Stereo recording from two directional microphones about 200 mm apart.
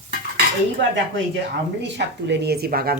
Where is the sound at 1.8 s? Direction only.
55° right (ahead or behind).